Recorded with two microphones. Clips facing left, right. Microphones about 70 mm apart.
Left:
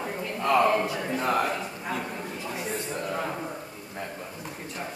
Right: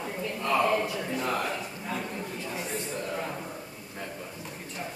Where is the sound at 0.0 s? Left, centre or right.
Left.